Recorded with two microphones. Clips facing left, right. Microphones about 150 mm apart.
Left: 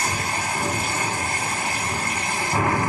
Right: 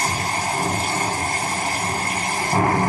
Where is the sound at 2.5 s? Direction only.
45° right (ahead or behind).